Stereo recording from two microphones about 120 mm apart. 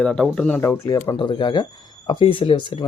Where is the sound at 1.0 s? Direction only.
40° left (ahead or behind).